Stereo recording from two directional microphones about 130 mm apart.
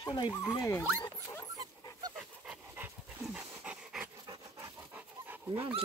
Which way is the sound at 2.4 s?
10° right (ahead or behind).